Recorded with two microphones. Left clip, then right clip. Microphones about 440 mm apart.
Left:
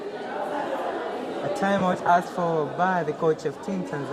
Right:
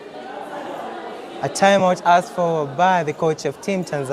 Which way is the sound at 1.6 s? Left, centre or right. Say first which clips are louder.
Right 9 dB; right.